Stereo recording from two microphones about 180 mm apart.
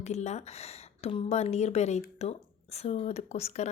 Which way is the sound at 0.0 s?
40° left (ahead or behind).